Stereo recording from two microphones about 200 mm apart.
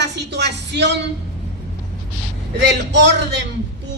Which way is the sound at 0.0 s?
60° right (ahead or behind).